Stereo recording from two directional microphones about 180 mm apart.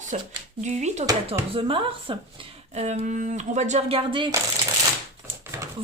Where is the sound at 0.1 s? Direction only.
40° right (ahead or behind).